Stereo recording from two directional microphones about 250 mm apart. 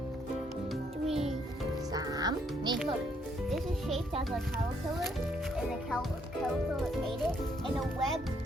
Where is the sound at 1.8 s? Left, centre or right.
Centre.